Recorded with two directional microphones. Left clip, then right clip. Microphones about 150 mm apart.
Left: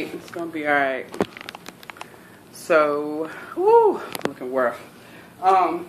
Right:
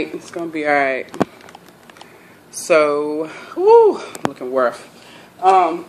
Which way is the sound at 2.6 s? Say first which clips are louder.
Right 4 dB; 15° right (ahead or behind).